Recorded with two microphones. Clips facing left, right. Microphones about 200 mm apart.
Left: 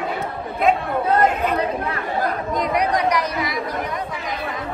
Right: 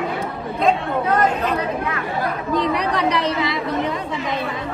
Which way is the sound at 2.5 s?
30° right (ahead or behind).